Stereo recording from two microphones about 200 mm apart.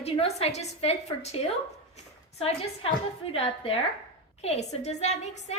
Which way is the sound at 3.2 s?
30° left (ahead or behind).